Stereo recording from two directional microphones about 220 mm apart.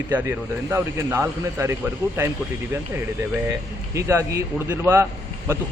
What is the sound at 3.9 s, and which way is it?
Speech, 15° right (ahead or behind).